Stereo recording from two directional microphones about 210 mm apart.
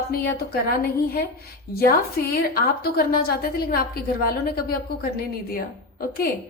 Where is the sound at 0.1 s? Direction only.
45° left (ahead or behind).